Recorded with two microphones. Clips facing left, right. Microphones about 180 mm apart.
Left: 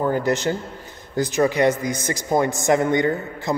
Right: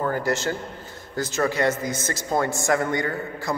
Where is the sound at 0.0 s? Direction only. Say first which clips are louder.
Left 4 dB; 20° left (ahead or behind).